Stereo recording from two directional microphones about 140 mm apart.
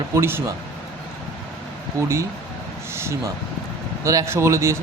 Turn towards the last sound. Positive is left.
turn(degrees=-20)  # may be behind; listen again after turning